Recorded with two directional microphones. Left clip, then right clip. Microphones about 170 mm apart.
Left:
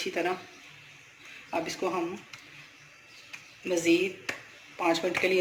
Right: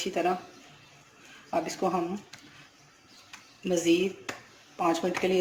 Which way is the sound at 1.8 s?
55° right (ahead or behind).